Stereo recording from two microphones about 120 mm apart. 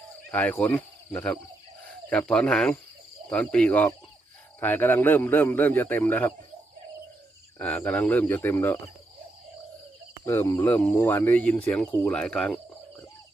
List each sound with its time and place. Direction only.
0.3 s speech: 15° left (ahead or behind)
7.6 s speech: 15° left (ahead or behind)
10.2 s speech: 20° left (ahead or behind)